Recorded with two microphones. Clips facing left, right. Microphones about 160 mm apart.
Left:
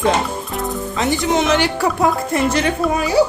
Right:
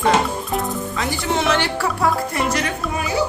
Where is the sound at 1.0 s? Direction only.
20° left (ahead or behind).